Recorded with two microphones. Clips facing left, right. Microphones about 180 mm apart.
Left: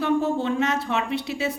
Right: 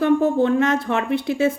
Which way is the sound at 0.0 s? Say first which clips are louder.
Right 6 dB; 55° right (ahead or behind).